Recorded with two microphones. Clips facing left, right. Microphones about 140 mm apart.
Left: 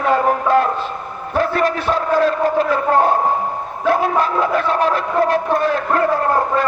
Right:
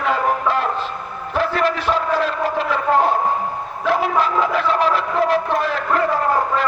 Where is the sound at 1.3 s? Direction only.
45° left (ahead or behind).